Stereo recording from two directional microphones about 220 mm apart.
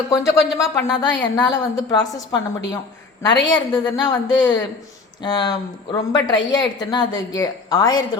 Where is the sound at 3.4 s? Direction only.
20° left (ahead or behind).